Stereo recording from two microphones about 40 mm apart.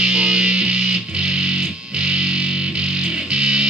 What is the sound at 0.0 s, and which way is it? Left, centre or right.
Music, right.